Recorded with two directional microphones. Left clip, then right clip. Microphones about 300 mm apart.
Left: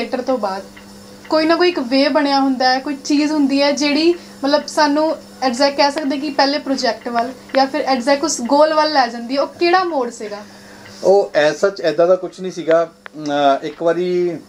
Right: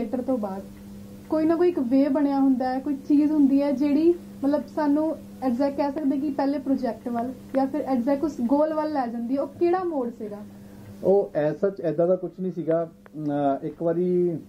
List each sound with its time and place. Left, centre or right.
0.0 s speech: centre
1.3 s speech: centre
11.3 s speech: centre